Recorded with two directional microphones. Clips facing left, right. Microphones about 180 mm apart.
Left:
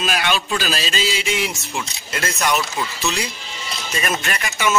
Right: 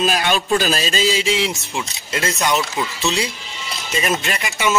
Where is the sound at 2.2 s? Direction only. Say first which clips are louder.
Right 1 dB; 20° right (ahead or behind).